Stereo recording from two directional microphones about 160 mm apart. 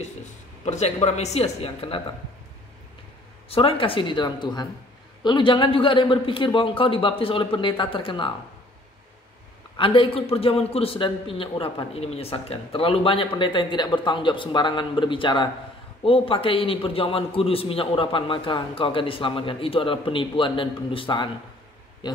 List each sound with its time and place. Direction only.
0.7 s speech: 45° left (ahead or behind)
3.4 s a man's voice: 35° left (ahead or behind)
9.8 s a man's voice: 35° left (ahead or behind)